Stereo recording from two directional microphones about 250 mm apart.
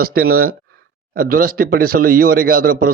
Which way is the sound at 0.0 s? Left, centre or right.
Right.